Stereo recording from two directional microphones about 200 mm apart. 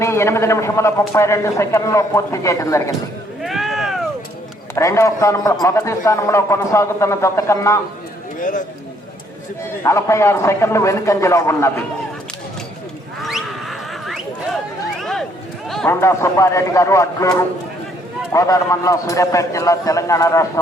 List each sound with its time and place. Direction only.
0.0 s a man's voice: 15° left (ahead or behind)
3.4 s a sound: centre (ahead or behind)
4.7 s a man's voice: 15° left (ahead or behind)
8.4 s speech: 40° left (ahead or behind)
9.8 s a man's voice: 15° left (ahead or behind)
13.2 s a sound: centre (ahead or behind)
15.7 s a man's voice: 10° left (ahead or behind)